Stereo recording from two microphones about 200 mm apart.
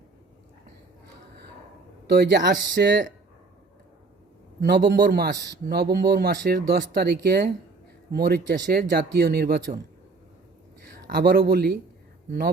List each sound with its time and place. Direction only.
2.0 s speech: 55° right (ahead or behind)
4.6 s speech: 55° right (ahead or behind)
11.0 s speech: 55° right (ahead or behind)